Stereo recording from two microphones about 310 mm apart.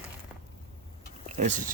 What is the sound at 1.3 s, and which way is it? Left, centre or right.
Speech, right.